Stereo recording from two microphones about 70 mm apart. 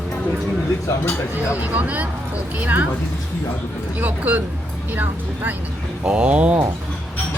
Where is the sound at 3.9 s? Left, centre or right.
Right.